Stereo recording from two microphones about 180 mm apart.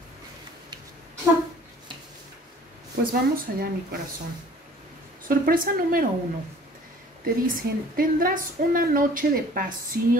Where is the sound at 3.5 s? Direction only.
55° right (ahead or behind).